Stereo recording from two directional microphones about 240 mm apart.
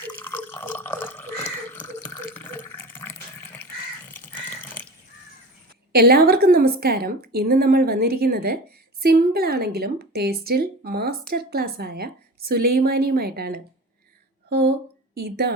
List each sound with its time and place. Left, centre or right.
0.1 s drip: centre
5.9 s a woman's voice: right
15.1 s a woman's voice: right